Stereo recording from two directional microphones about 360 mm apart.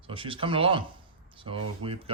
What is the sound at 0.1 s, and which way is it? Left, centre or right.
Speech, centre.